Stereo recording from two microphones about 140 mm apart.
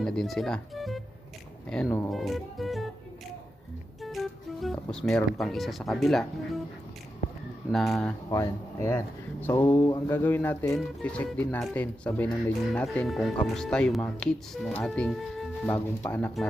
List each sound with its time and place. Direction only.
0.0 s speech: 5° left (ahead or behind)
4.0 s speech: centre (ahead or behind)
7.7 s speech: centre (ahead or behind)
8.3 s speech: 25° left (ahead or behind)
9.5 s a sound: 20° left (ahead or behind)
12.6 s speech: 5° left (ahead or behind)
15.6 s a sound: 10° left (ahead or behind)